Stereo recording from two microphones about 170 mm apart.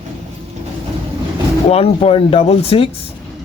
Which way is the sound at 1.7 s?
35° left (ahead or behind).